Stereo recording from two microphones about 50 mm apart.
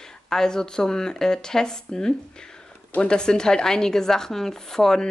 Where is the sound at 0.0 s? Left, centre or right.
Centre.